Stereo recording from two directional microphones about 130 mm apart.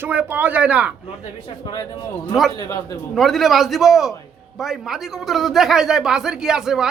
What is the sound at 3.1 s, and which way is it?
Speech, centre (ahead or behind).